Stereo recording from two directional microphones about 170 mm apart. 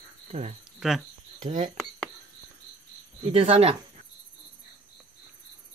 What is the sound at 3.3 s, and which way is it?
Speech, 40° right (ahead or behind).